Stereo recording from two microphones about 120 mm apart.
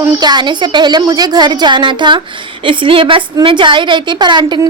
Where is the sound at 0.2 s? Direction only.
35° right (ahead or behind).